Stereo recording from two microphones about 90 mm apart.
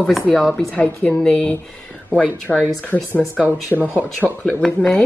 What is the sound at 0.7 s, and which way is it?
Speech, 15° left (ahead or behind).